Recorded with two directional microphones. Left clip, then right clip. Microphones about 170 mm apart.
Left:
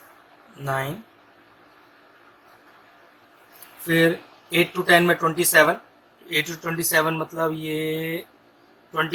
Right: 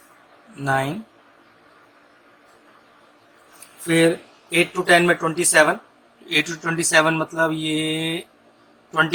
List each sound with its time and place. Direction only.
0.6 s speech: 30° right (ahead or behind)
3.8 s speech: 30° right (ahead or behind)
4.5 s a man's voice: 15° right (ahead or behind)